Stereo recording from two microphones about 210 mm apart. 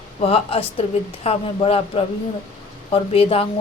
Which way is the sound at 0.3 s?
30° left (ahead or behind).